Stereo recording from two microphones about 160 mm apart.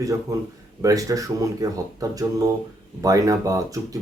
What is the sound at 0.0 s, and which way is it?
Speech, 20° right (ahead or behind).